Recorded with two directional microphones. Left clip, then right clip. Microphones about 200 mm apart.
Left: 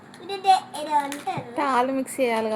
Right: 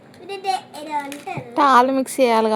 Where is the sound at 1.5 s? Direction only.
35° right (ahead or behind).